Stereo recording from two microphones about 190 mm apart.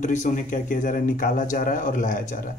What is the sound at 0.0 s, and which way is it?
Speech, 40° left (ahead or behind).